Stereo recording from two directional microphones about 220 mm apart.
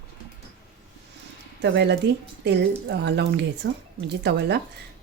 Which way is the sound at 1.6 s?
50° right (ahead or behind).